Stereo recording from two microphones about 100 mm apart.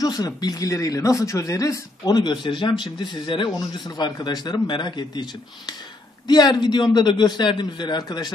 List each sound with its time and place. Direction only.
0.0 s speech: 40° left (ahead or behind)